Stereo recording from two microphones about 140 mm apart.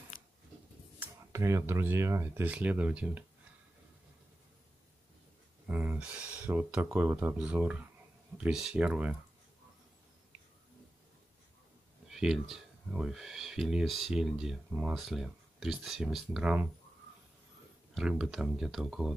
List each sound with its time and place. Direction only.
0.9 s speech: 15° right (ahead or behind)
5.7 s speech: 10° right (ahead or behind)
12.1 s speech: 5° right (ahead or behind)
17.9 s speech: 5° right (ahead or behind)